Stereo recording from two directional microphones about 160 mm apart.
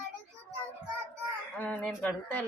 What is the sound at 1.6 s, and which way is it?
Chicken, 10° left (ahead or behind).